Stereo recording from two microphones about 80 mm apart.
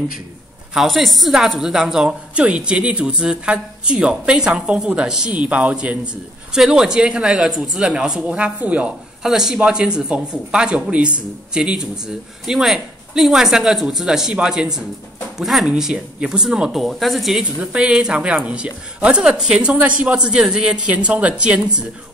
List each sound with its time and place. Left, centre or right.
0.7 s a woman's voice: centre
9.2 s a woman's voice: centre
17.4 s a woman's voice: centre